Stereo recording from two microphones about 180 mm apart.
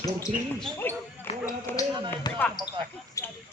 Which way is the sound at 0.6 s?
10° left (ahead or behind).